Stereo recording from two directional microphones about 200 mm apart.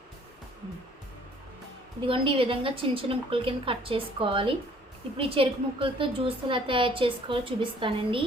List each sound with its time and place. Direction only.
2.0 s a woman's voice: 25° right (ahead or behind)